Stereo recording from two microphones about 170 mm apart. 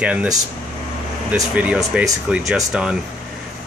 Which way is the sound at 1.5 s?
5° right (ahead or behind).